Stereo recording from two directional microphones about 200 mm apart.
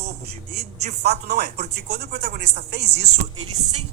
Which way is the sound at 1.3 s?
55° right (ahead or behind).